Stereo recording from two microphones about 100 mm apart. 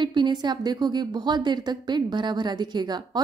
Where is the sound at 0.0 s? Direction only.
50° right (ahead or behind).